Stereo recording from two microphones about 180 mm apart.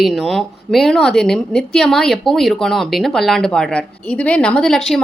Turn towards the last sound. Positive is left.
turn(degrees=0)  # may be behind; listen again after turning